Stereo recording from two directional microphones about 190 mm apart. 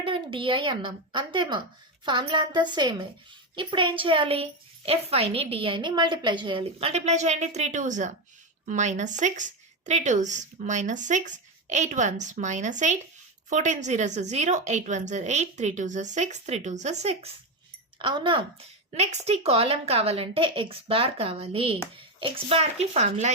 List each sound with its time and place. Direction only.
0.0 s a woman's voice: 25° right (ahead or behind)
18.9 s speech: 35° right (ahead or behind)